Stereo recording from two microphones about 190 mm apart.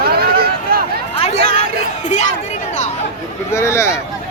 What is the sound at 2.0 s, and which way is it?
Chatter, 40° left (ahead or behind).